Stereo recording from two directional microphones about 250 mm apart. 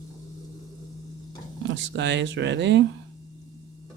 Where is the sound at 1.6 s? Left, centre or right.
Right.